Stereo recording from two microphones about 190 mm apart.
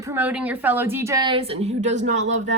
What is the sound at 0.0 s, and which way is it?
A woman's voice, 10° right (ahead or behind).